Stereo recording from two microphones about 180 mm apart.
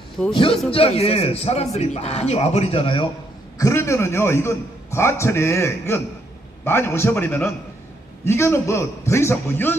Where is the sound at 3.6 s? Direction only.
15° left (ahead or behind).